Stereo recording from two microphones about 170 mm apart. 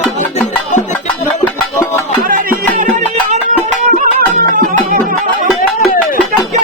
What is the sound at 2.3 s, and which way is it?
Music, 55° right (ahead or behind).